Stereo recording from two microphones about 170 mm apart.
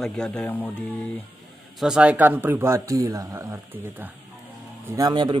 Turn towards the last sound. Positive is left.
turn(degrees=-25)  # may be behind; listen again after turning